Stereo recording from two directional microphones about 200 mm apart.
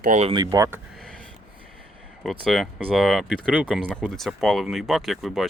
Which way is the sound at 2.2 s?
Centre (ahead or behind).